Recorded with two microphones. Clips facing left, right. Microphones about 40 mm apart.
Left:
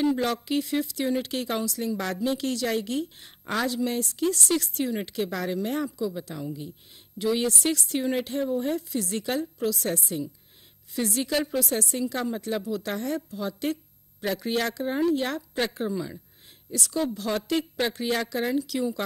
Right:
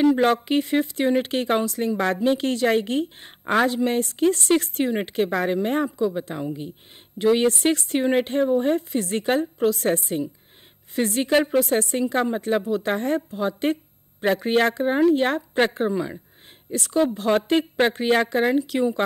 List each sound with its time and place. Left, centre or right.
0.0 s speech: right